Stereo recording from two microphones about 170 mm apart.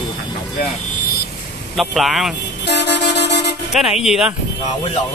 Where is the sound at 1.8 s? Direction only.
Centre (ahead or behind).